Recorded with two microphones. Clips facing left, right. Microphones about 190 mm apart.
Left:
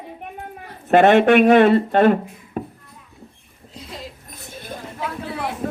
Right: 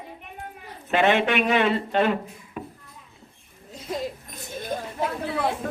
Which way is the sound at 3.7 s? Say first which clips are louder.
Right 6 dB; 45° right (ahead or behind).